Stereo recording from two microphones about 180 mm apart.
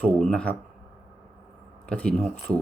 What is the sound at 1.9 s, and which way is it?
Speech, 5° left (ahead or behind).